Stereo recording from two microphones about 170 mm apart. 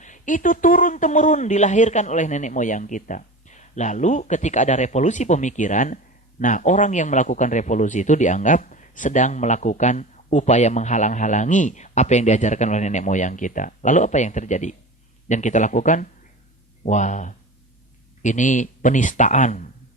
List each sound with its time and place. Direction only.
0.0 s a man's voice: 50° left (ahead or behind)